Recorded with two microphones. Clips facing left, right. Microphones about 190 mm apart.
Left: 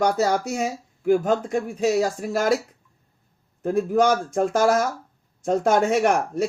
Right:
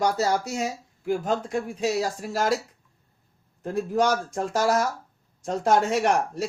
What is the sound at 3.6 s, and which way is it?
Speech, 50° left (ahead or behind).